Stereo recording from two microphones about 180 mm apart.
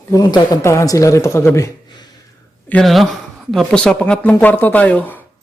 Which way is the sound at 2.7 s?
5° left (ahead or behind).